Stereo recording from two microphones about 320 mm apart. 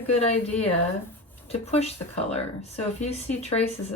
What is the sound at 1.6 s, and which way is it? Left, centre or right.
Speech, centre.